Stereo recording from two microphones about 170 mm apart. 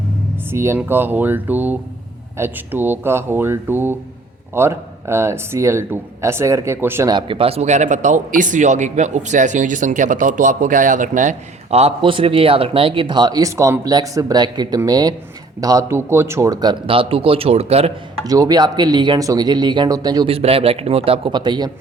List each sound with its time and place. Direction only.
0.5 s speech: 15° right (ahead or behind)
7.1 s a man's voice: 30° right (ahead or behind)
18.3 s a man's voice: 20° right (ahead or behind)
20.3 s a man's voice: 35° right (ahead or behind)